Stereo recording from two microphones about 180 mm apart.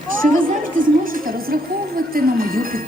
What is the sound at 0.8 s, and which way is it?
A woman's voice, 50° right (ahead or behind).